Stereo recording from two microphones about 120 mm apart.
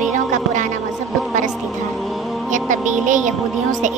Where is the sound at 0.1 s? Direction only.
90° right.